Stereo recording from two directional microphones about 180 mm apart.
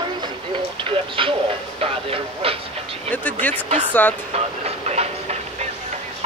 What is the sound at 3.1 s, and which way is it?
Speech, 10° left (ahead or behind).